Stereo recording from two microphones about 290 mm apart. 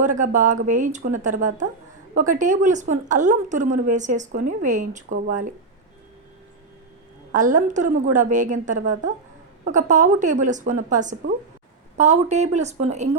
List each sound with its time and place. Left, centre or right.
0.0 s a woman's voice: right
7.3 s a woman's voice: right